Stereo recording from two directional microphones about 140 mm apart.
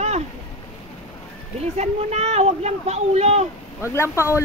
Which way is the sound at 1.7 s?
50° right (ahead or behind).